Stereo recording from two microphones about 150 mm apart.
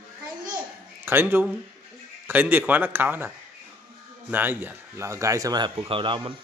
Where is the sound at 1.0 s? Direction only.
15° right (ahead or behind).